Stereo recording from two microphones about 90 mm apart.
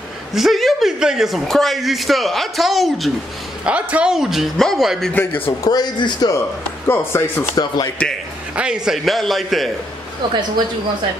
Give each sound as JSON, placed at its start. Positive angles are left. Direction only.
{"t": 0.3, "sound": "speech", "side_deg": 0}
{"t": 3.6, "sound": "speech", "side_deg": -15}
{"t": 5.1, "sound": "speech", "side_deg": 20}
{"t": 5.6, "sound": "speech", "side_deg": 50}
{"t": 6.9, "sound": "speech", "side_deg": 30}
{"t": 7.5, "sound": "speech", "side_deg": 45}
{"t": 8.5, "sound": "speech", "side_deg": -5}
{"t": 10.2, "sound": "speech", "side_deg": -65}